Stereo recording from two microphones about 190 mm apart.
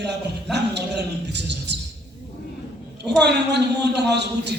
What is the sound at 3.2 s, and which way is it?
A man's voice, 60° right (ahead or behind).